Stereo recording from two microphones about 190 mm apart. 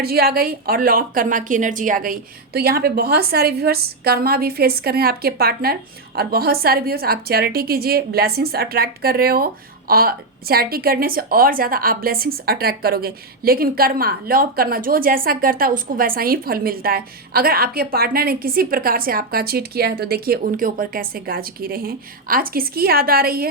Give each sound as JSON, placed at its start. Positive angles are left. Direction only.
{"t": 0.0, "sound": "a woman's voice", "side_deg": -55}